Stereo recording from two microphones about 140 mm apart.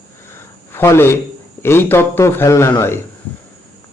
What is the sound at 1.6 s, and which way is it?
Speech, 15° left (ahead or behind).